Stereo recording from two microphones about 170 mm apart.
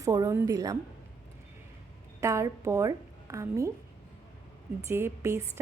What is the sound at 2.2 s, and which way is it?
A woman's voice, 15° right (ahead or behind).